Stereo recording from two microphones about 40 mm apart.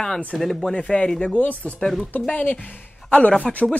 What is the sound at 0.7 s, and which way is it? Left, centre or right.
Speech, left.